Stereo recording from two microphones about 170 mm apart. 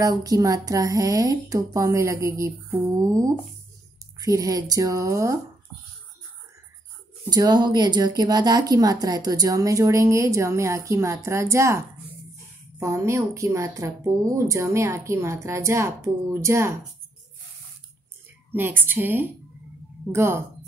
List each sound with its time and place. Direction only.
0.0 s speech: 20° right (ahead or behind)
7.2 s speech: 25° right (ahead or behind)
18.5 s speech: 10° right (ahead or behind)